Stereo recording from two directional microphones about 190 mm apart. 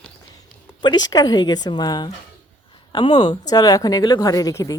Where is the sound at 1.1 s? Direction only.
20° left (ahead or behind).